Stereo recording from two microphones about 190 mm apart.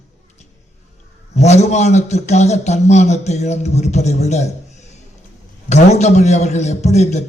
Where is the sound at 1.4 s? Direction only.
35° left (ahead or behind).